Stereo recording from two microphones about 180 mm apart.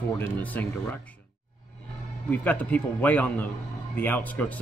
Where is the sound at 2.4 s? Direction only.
10° left (ahead or behind).